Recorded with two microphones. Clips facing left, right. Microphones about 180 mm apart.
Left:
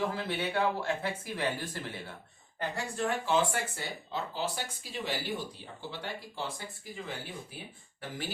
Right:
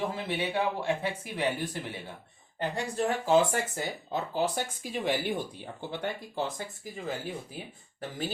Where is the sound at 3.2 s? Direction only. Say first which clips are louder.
Right 7 dB; 40° right (ahead or behind).